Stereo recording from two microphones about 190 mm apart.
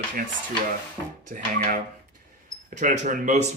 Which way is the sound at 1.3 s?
45° right (ahead or behind).